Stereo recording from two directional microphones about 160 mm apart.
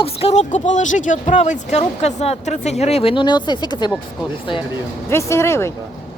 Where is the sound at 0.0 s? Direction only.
40° left (ahead or behind).